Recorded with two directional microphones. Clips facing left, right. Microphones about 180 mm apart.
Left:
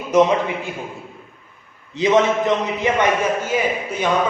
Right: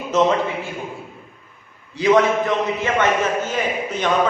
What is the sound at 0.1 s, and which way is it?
Speech, 15° left (ahead or behind).